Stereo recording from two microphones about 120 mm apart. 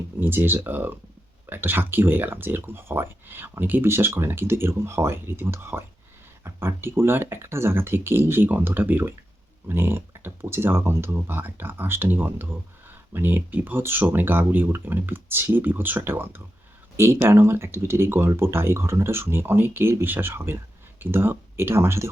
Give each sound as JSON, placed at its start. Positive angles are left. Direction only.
{"t": 0.2, "sound": "speech", "side_deg": -15}